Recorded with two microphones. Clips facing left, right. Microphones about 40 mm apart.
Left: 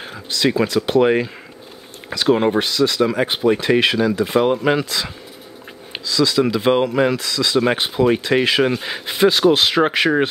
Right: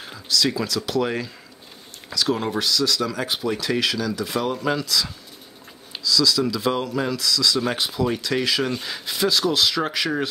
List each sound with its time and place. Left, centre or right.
0.0 s speech: left